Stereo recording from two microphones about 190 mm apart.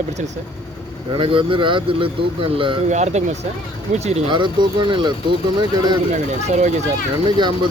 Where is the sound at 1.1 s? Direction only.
25° right (ahead or behind).